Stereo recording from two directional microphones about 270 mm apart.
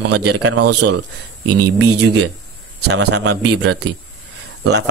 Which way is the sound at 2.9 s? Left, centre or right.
Right.